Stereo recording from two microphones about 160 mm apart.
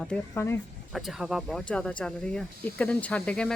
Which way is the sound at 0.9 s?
Centre (ahead or behind).